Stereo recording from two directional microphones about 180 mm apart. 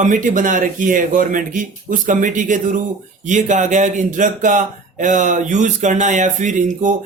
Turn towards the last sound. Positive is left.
turn(degrees=-45)  # may be behind; listen again after turning